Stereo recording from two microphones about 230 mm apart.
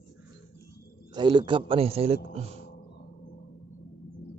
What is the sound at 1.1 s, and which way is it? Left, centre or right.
A man's voice, centre.